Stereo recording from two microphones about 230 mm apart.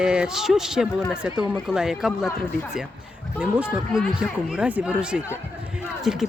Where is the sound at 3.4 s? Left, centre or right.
Centre.